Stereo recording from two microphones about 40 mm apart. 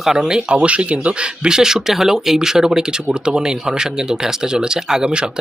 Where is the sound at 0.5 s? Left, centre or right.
Right.